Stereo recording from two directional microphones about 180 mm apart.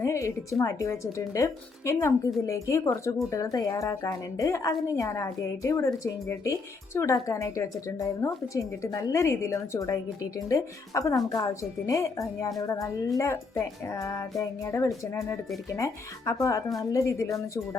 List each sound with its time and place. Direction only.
0.0 s a woman's voice: 15° left (ahead or behind)